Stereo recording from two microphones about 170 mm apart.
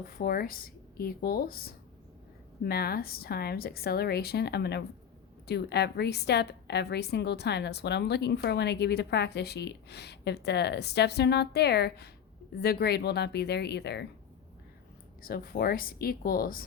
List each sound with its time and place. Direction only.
0.2 s a woman's voice: 60° left (ahead or behind); by 14.1 s 80° left
15.2 s speech: 60° left (ahead or behind)